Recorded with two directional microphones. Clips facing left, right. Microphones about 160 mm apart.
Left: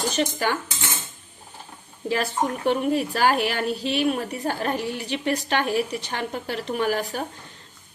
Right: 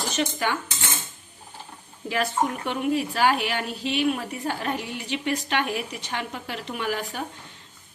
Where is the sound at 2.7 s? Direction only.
45° left (ahead or behind).